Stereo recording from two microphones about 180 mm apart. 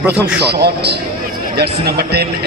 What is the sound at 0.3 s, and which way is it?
A man's voice, 65° right (ahead or behind).